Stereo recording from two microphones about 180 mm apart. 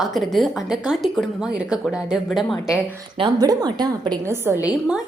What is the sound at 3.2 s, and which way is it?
A woman's voice, 20° right (ahead or behind).